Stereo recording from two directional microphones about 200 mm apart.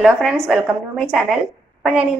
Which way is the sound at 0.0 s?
Centre (ahead or behind).